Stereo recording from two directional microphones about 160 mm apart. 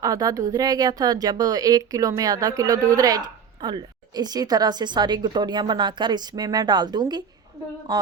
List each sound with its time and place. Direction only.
0.0 s speech: 20° right (ahead or behind)